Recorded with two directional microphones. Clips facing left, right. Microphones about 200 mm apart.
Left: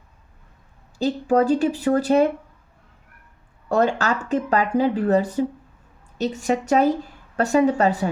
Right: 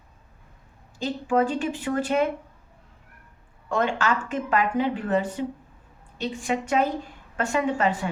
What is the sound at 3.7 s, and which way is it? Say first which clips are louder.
Speech: left 4 dB; 40° left (ahead or behind).